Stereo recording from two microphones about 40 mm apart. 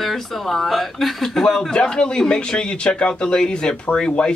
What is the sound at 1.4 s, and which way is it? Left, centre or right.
A man's voice, centre.